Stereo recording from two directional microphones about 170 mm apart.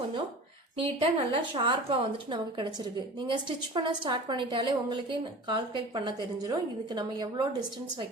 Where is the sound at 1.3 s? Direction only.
30° right (ahead or behind).